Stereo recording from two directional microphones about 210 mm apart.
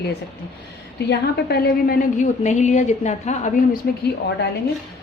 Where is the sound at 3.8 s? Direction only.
45° left (ahead or behind).